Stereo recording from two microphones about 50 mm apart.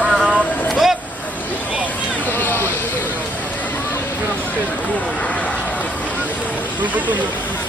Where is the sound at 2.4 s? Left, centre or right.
Left.